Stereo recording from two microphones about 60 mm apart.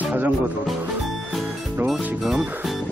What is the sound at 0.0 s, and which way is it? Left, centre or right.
Music, right.